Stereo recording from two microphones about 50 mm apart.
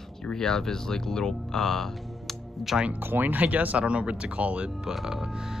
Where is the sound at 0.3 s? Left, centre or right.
Centre.